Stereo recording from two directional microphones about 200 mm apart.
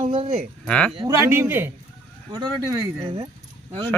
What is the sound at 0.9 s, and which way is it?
Speech, 15° right (ahead or behind).